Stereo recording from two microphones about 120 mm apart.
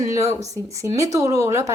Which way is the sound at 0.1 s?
25° right (ahead or behind).